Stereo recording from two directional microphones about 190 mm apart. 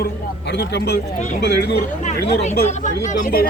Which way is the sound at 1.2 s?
40° left (ahead or behind).